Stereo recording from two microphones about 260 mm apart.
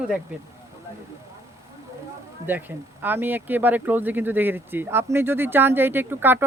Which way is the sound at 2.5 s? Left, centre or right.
Centre.